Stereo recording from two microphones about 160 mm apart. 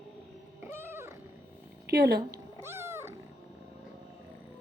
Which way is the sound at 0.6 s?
15° right (ahead or behind).